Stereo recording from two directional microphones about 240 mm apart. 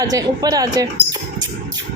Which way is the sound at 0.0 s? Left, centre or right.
Centre.